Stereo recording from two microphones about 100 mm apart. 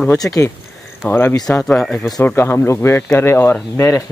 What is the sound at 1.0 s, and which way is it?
Speech, 20° left (ahead or behind).